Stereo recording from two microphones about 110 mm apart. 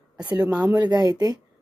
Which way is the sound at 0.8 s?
35° right (ahead or behind).